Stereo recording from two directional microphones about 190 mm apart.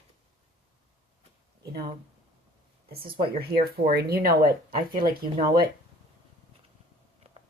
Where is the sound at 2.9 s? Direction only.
50° right (ahead or behind).